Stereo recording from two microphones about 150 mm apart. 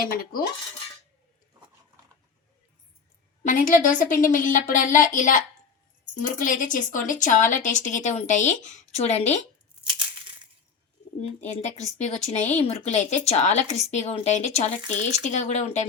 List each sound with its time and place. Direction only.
3.4 s speech: 65° left (ahead or behind); by 9.4 s 45° left (ahead or behind)
11.4 s speech: 50° left (ahead or behind)